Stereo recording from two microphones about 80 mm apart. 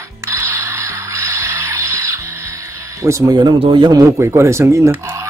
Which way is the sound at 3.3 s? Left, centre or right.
Right.